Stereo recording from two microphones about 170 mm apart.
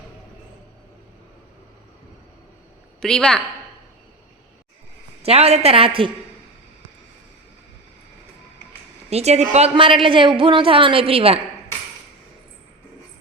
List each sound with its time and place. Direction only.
3.0 s a woman's voice: 5° left (ahead or behind)
5.2 s a woman's voice: 35° right (ahead or behind)
9.0 s a woman's voice: 40° right (ahead or behind)